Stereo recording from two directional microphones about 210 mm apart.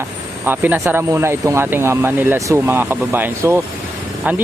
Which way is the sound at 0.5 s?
10° right (ahead or behind).